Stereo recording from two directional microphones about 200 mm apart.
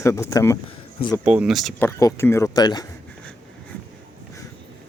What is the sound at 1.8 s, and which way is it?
Speech, 15° left (ahead or behind).